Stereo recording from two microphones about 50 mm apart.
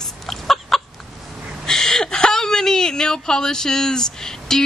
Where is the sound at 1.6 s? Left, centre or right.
Centre.